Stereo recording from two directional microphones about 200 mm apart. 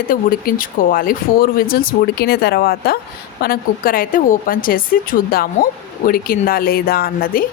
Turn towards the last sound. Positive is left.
turn(degrees=50)  # may be behind; listen again after turning